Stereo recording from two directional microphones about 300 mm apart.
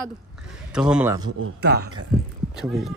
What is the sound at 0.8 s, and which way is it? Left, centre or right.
Speech, centre.